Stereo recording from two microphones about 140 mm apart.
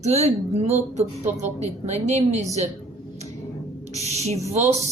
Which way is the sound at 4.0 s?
50° right (ahead or behind).